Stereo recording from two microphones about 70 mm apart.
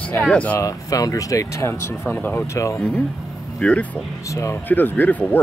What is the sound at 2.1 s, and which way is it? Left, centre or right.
Speech, left.